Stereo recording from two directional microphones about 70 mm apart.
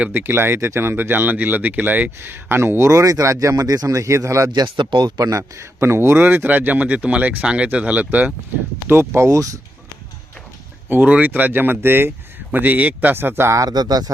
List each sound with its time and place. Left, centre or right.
0.1 s speech: right
3.5 s a man's voice: right
4.5 s speech: right
8.9 s a man's voice: right
10.8 s speech: right
13.6 s speech: right